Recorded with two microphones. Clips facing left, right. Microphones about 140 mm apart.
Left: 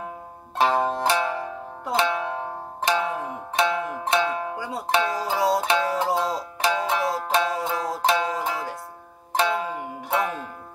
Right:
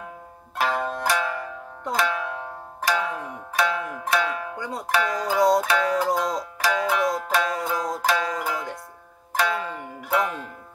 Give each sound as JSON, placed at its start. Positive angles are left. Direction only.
{"t": 0.6, "sound": "zither", "side_deg": 25}
{"t": 2.0, "sound": "music", "side_deg": 25}
{"t": 4.6, "sound": "speech", "side_deg": 5}
{"t": 4.8, "sound": "music", "side_deg": 25}
{"t": 9.6, "sound": "music", "side_deg": 10}
{"t": 9.9, "sound": "music", "side_deg": 25}